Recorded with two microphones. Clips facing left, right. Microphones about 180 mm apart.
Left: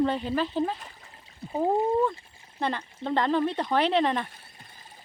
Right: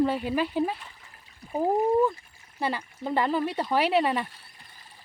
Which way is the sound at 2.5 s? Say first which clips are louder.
Even; 5° right (ahead or behind).